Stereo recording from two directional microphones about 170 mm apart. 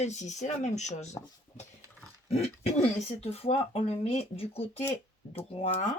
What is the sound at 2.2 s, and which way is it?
Speech, 40° left (ahead or behind).